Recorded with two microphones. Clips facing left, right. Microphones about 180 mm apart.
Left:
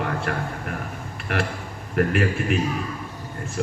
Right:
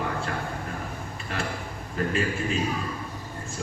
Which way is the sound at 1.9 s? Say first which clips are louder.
Left 5 dB; 70° left (ahead or behind).